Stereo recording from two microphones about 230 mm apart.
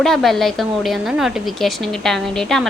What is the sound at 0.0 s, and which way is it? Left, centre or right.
A woman's voice, centre.